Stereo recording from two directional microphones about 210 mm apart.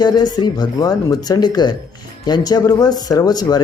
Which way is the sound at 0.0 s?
20° left (ahead or behind).